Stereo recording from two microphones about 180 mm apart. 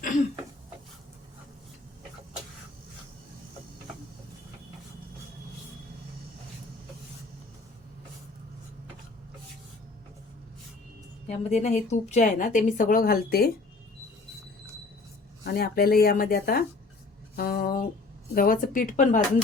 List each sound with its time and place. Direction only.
11.3 s a woman's voice: 40° left (ahead or behind); by 13.5 s 55° left (ahead or behind)
15.4 s a woman's voice: 60° left (ahead or behind)